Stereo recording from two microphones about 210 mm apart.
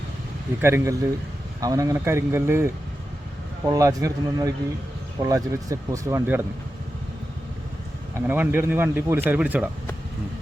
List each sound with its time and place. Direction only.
0.6 s speech: 10° right (ahead or behind)
8.1 s speech: 10° right (ahead or behind)